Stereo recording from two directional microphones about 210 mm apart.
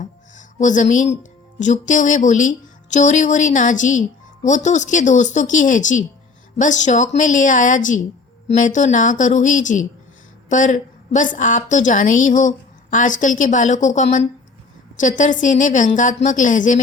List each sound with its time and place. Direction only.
0.0 s a woman's voice: 35° left (ahead or behind)